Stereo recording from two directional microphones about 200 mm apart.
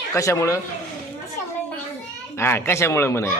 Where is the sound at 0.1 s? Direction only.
15° left (ahead or behind).